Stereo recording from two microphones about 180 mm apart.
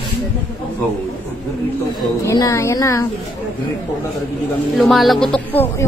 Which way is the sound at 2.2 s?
20° left (ahead or behind).